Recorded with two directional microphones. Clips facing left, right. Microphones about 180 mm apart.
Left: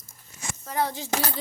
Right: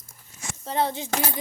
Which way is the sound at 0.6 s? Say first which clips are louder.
Right 2 dB; 25° right (ahead or behind).